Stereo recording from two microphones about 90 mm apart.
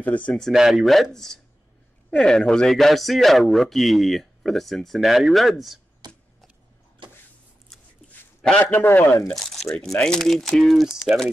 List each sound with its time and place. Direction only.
0.0 s speech: 15° left (ahead or behind)
0.3 s speech: 5° left (ahead or behind)
6.0 s a sound: 50° right (ahead or behind)
8.7 s speech: 25° left (ahead or behind)
9.3 s crumpling: centre (ahead or behind)
9.8 s speech: 10° left (ahead or behind)